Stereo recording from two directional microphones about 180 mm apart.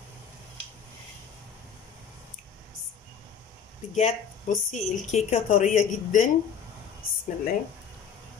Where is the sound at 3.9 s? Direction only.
40° left (ahead or behind).